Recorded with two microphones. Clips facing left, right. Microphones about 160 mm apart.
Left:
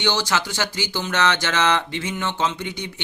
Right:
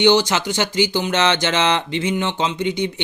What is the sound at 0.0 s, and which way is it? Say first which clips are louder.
Speech: right 7 dB; 20° right (ahead or behind).